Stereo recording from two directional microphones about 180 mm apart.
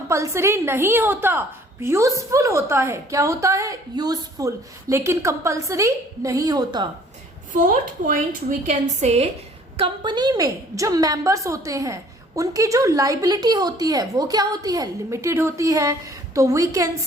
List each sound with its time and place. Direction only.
0.1 s a woman's voice: 15° right (ahead or behind)
7.5 s a woman's voice: 45° right (ahead or behind)
9.0 s a woman's voice: 35° right (ahead or behind); by 16.9 s 15° right (ahead or behind)